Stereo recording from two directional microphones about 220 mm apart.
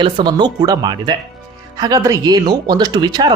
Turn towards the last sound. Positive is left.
turn(degrees=-20)  # may be behind; listen again after turning